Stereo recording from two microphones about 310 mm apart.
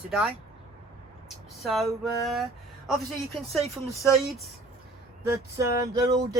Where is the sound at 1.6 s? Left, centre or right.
Centre.